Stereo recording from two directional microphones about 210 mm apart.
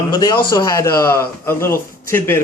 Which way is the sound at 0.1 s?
20° left (ahead or behind).